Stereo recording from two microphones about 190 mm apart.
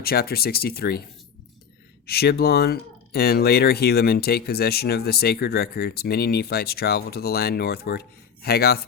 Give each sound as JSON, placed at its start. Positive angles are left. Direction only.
{"t": 0.0, "sound": "speech", "side_deg": 55}
{"t": 2.0, "sound": "speech", "side_deg": 55}